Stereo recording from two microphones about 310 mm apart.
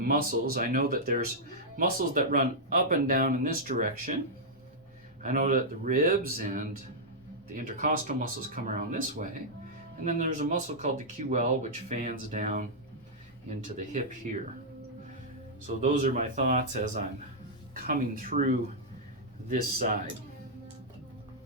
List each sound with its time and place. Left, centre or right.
0.1 s speech: right
5.2 s speech: right
15.6 s speech: right
19.5 s speech: right